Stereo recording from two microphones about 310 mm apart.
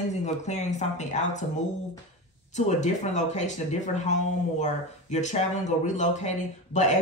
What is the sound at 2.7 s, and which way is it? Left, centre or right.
Speech, left.